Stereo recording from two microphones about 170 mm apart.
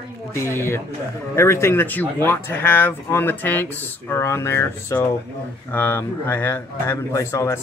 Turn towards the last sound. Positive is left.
turn(degrees=15)  # may be behind; listen again after turning